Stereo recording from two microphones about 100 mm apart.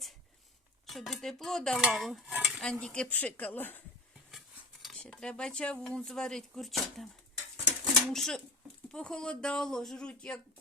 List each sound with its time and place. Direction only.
0.9 s dishes: centre (ahead or behind)
1.8 s stir: centre (ahead or behind)
2.6 s speech: 10° left (ahead or behind)
4.3 s cutlery: centre (ahead or behind)
4.9 s speech: 5° left (ahead or behind)
8.1 s dishes: 5° left (ahead or behind)
8.9 s speech: 10° left (ahead or behind)